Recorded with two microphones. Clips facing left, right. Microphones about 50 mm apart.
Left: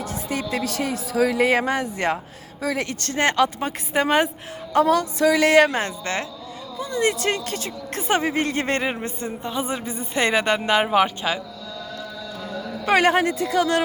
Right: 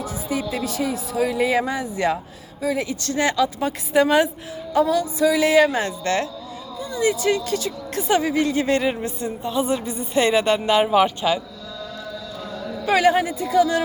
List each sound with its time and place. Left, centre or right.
0.0 s music: left
0.5 s speech: left
2.6 s speech: left
3.0 s speech: left
3.6 s speech: left
4.7 s speech: left
6.0 s speech: left
6.7 s speech: left
7.0 s speech: left
12.8 s a man's voice: left